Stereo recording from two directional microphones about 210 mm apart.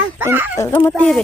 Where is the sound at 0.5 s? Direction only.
10° left (ahead or behind).